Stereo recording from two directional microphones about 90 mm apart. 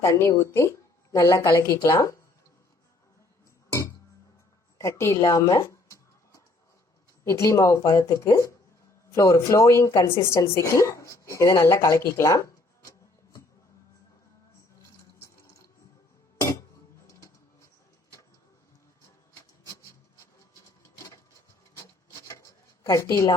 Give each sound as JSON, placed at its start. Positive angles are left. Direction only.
{"t": 0.0, "sound": "a woman's voice", "side_deg": 30}
{"t": 4.8, "sound": "a sound", "side_deg": 35}
{"t": 7.3, "sound": "a woman's voice", "side_deg": 35}
{"t": 15.2, "sound": "water", "side_deg": 30}
{"t": 16.4, "sound": "music", "side_deg": 35}
{"t": 17.1, "sound": "printer", "side_deg": 35}
{"t": 22.9, "sound": "a woman's voice", "side_deg": 35}